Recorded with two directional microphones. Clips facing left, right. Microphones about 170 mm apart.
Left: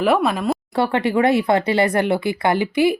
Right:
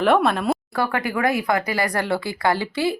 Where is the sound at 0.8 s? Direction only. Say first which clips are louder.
Left 8 dB; 25° left (ahead or behind).